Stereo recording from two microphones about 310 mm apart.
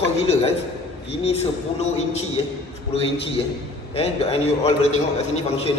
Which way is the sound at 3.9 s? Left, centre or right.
Centre.